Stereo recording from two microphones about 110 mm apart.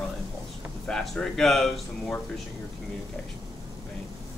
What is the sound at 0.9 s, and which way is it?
Speech, 5° left (ahead or behind).